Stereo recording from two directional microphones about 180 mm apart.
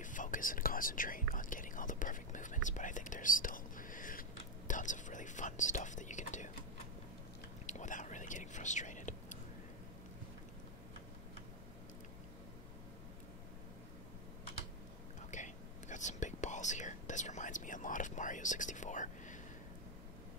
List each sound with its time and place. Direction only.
0.0 s whispering: 45° left (ahead or behind)
7.6 s whispering: 45° left (ahead or behind)
15.3 s whispering: 45° left (ahead or behind)